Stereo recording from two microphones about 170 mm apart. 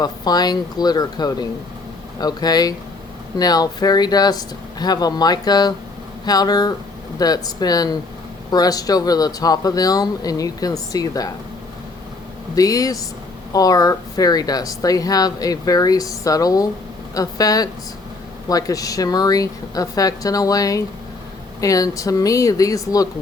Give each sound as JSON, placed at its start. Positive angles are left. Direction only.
{"t": 0.0, "sound": "speech", "side_deg": 25}
{"t": 12.5, "sound": "speech", "side_deg": 20}